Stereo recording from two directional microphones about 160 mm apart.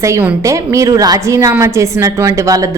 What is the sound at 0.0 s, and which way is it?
A woman's voice, 15° right (ahead or behind).